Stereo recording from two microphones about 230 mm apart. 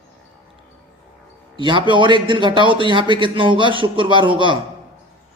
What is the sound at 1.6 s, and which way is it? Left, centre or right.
A man's voice, right.